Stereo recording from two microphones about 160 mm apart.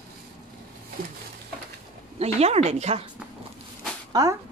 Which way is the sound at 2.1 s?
40° right (ahead or behind).